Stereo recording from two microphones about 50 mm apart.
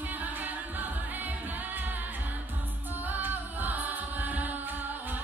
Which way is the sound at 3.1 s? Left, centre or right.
Right.